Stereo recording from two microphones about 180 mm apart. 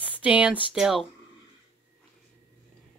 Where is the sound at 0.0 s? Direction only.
5° right (ahead or behind).